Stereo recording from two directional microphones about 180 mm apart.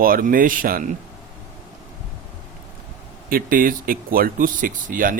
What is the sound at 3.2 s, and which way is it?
Speech, 50° right (ahead or behind).